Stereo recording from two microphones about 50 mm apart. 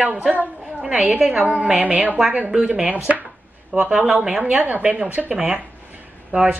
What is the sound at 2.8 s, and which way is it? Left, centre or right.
Chopping, right.